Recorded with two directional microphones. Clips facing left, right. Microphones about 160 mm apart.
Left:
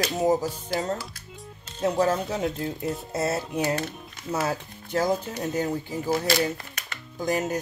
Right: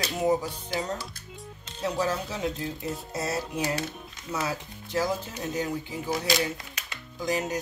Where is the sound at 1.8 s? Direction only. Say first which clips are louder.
Left 5 dB; 50° left (ahead or behind).